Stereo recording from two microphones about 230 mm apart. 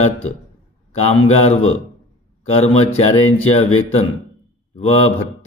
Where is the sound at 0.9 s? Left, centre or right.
Left.